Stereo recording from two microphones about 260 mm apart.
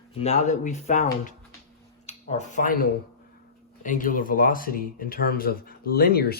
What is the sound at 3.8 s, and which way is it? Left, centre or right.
Speech, left.